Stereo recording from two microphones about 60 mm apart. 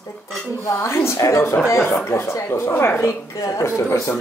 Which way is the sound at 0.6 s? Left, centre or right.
Left.